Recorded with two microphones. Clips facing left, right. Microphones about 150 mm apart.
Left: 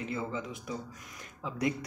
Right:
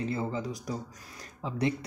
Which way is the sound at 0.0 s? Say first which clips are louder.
Right 4 dB; 35° right (ahead or behind).